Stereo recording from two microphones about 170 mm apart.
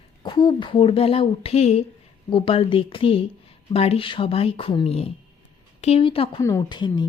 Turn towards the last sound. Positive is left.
turn(degrees=25)  # may be behind; listen again after turning